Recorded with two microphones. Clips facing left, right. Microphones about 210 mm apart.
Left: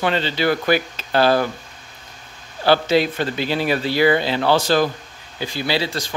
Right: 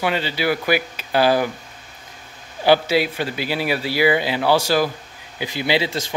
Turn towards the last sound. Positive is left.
turn(degrees=-20)  # may be behind; listen again after turning